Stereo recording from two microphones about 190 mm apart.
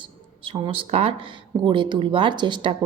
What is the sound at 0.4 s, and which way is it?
Speech, 25° right (ahead or behind).